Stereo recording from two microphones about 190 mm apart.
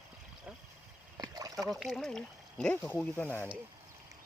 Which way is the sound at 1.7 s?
Centre (ahead or behind).